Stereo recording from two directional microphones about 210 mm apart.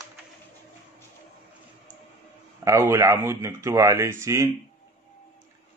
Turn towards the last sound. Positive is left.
turn(degrees=-10)  # may be behind; listen again after turning